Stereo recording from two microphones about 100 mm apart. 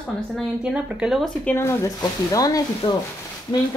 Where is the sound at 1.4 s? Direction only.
25° left (ahead or behind).